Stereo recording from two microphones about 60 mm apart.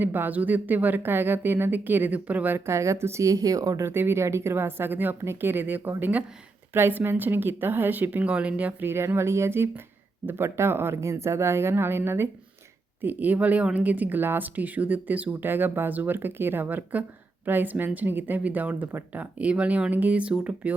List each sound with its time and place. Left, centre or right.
0.0 s speech: right
2.6 s speech: right
3.2 s speech: right
3.8 s a woman's voice: right
6.7 s speech: right
8.9 s speech: right
13.0 s a woman's voice: right